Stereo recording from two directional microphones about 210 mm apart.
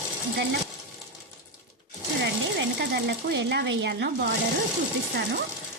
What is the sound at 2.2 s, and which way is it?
Speech, 55° right (ahead or behind).